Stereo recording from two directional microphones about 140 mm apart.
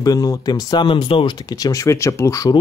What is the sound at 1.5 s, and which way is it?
Speech, 25° left (ahead or behind).